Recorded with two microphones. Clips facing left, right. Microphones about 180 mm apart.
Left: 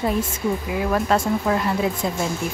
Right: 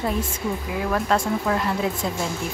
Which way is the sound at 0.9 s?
5° left (ahead or behind).